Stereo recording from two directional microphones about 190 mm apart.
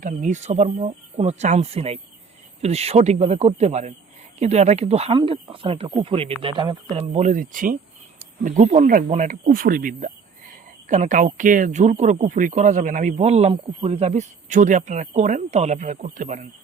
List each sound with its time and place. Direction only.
0.0 s speech: 40° right (ahead or behind); by 7.0 s 25° right (ahead or behind)
7.1 s speech: 40° right (ahead or behind)